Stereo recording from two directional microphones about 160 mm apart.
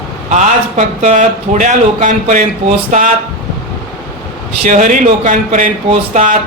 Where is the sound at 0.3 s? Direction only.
50° right (ahead or behind).